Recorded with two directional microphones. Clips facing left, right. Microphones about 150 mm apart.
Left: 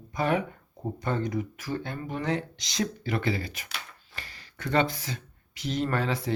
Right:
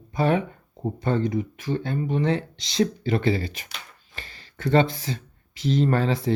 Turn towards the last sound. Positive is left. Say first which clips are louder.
# right 6 dB
turn(degrees=-30)  # may be behind; listen again after turning